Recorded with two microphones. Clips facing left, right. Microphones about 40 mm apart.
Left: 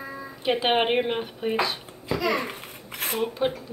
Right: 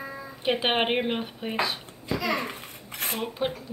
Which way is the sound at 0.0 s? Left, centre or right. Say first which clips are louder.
Left 1 dB; centre.